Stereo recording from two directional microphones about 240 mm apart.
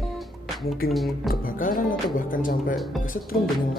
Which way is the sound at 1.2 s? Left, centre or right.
Left.